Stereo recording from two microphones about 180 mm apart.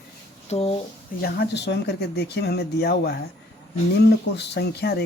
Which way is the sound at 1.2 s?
65° left (ahead or behind).